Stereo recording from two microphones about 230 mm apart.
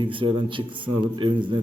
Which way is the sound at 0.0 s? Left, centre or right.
Right.